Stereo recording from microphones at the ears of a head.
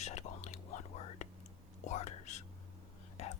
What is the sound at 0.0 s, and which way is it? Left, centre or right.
Whispering, left.